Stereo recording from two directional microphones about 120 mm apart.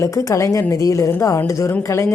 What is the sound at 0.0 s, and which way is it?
A woman's voice, 25° left (ahead or behind).